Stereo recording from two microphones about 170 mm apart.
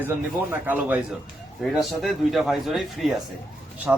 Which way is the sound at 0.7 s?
10° right (ahead or behind).